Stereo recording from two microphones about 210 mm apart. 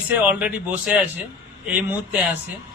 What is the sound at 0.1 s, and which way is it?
A man's voice, 5° right (ahead or behind).